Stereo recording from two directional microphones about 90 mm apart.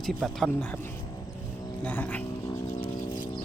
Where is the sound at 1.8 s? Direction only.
20° left (ahead or behind).